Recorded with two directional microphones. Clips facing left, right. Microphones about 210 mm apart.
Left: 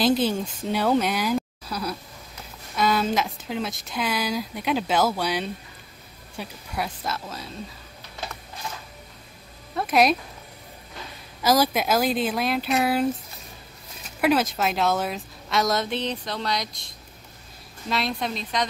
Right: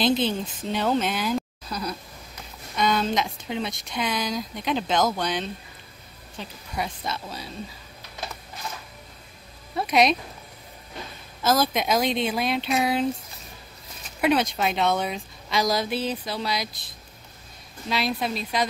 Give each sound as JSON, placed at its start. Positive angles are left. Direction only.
{"t": 0.0, "sound": "speech", "side_deg": 10}
{"t": 9.8, "sound": "speech", "side_deg": 5}
{"t": 11.4, "sound": "speech", "side_deg": 10}
{"t": 14.2, "sound": "speech", "side_deg": 0}